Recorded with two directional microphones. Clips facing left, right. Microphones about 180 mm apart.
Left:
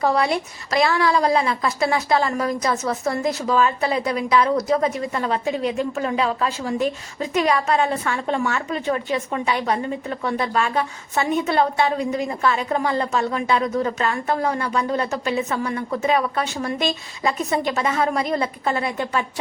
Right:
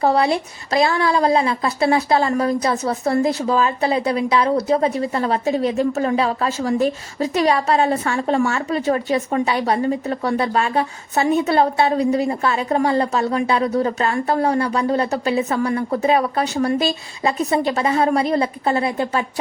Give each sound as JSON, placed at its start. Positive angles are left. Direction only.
{"t": 0.0, "sound": "a woman's voice", "side_deg": -30}